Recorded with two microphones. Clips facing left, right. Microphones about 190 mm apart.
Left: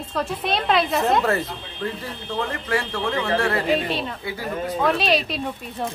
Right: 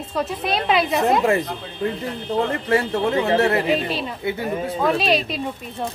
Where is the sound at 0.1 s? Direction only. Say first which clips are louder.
Right 1 dB; 5° right (ahead or behind).